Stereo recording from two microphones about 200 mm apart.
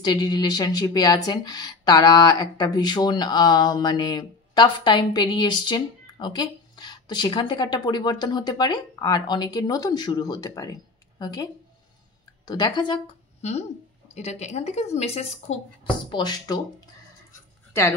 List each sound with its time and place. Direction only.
0.0 s speech: 20° left (ahead or behind)
12.4 s a woman's voice: 20° left (ahead or behind)